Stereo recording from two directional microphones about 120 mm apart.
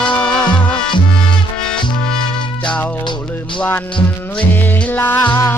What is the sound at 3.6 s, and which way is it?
Music, 15° left (ahead or behind).